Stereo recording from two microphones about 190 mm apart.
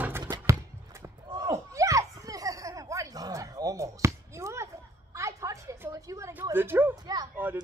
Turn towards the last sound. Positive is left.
turn(degrees=-20)  # may be behind; listen again after turning